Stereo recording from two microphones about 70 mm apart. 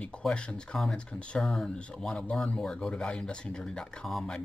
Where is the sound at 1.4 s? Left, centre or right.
Centre.